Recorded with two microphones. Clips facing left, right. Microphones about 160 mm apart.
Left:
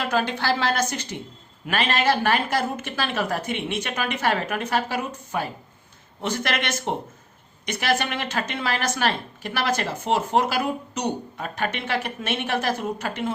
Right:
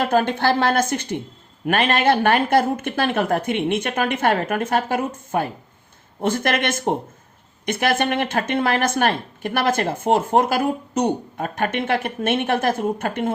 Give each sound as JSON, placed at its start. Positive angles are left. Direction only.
{"t": 0.0, "sound": "speech", "side_deg": -50}